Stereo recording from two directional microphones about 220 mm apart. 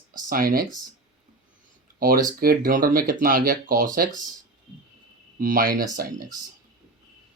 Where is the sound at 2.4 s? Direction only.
40° right (ahead or behind).